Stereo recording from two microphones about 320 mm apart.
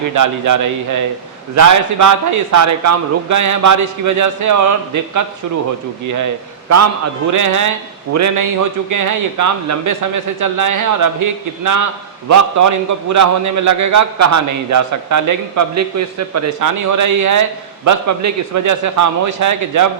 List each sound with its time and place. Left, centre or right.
0.1 s a man's voice: right
7.3 s a man's voice: right